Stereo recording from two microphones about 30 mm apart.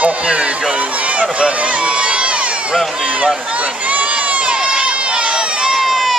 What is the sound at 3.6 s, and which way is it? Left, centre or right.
Crowd, right.